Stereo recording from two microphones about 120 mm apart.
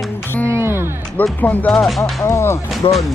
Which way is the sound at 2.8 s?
45° left (ahead or behind).